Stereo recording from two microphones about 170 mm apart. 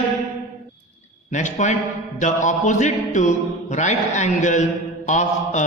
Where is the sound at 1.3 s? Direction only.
45° left (ahead or behind).